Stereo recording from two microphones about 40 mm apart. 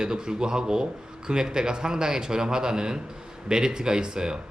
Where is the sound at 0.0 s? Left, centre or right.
Centre.